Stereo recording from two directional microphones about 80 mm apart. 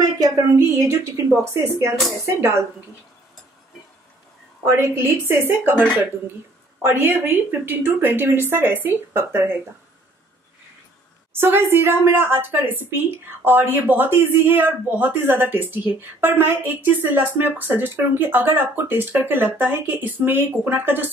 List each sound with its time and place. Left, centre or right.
0.0 s a sound: right
0.6 s a woman's voice: right
4.6 s a woman's voice: right
6.9 s a woman's voice: right
11.3 s a woman's voice: right